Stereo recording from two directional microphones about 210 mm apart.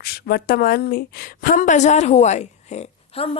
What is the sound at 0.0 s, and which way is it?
A woman's voice, 50° left (ahead or behind).